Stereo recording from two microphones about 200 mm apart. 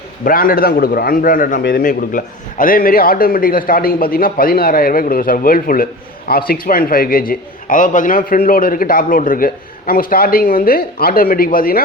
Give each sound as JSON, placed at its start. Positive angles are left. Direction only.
{"t": 0.3, "sound": "a man's voice", "side_deg": 45}